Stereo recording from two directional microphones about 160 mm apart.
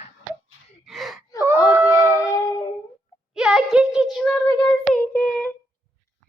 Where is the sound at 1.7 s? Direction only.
10° right (ahead or behind).